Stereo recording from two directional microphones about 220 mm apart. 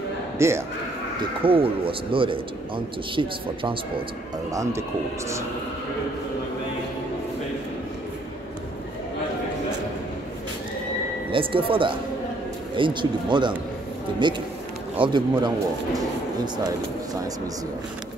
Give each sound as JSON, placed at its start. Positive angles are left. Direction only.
{"t": 0.4, "sound": "speech", "side_deg": -10}
{"t": 1.4, "sound": "a man's voice", "side_deg": -25}
{"t": 11.3, "sound": "a man's voice", "side_deg": -25}